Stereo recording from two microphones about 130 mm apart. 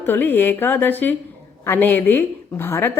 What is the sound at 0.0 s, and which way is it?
A woman's voice, 15° left (ahead or behind).